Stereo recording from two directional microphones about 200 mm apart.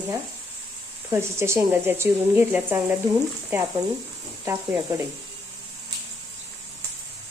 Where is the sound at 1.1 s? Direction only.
15° right (ahead or behind).